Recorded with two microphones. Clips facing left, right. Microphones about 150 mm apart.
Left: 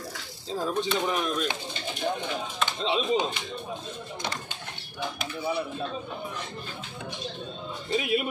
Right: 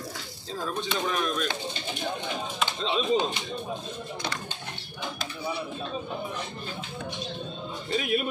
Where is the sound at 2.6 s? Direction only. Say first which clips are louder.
Even; 20° left (ahead or behind).